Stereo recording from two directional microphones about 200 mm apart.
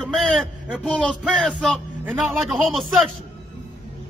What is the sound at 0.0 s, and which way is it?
A man's voice, 5° left (ahead or behind).